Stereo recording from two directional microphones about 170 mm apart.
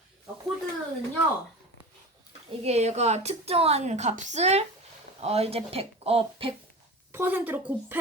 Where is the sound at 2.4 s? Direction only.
40° right (ahead or behind).